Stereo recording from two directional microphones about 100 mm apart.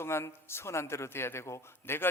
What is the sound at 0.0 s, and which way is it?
Speech, 25° left (ahead or behind).